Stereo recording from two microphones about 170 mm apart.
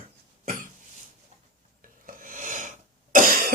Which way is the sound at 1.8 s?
50° right (ahead or behind).